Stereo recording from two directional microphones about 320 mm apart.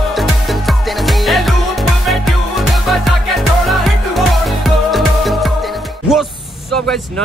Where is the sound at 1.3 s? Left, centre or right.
Centre.